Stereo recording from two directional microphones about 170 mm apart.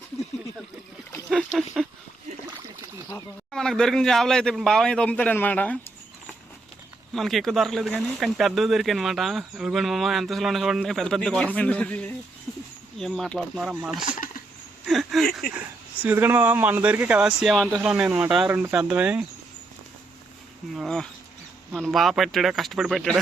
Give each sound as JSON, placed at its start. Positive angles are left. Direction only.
{"t": 1.1, "sound": "a sound", "side_deg": 5}
{"t": 3.5, "sound": "speech", "side_deg": 5}
{"t": 7.1, "sound": "a man's voice", "side_deg": 0}
{"t": 14.0, "sound": "a sound", "side_deg": 50}
{"t": 14.8, "sound": "speech", "side_deg": 0}
{"t": 16.0, "sound": "speech", "side_deg": -10}
{"t": 20.7, "sound": "speech", "side_deg": 5}